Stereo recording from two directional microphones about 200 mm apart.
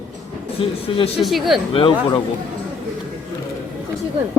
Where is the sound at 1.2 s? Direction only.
Centre (ahead or behind).